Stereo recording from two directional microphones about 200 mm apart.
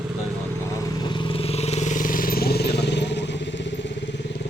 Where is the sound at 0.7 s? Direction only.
15° left (ahead or behind); by 4.2 s 60° left (ahead or behind).